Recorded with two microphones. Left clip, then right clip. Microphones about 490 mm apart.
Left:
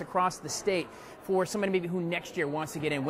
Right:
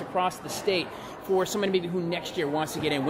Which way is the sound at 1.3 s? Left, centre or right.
Left.